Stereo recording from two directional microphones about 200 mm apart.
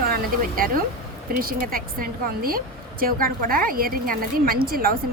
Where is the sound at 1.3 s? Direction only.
45° right (ahead or behind).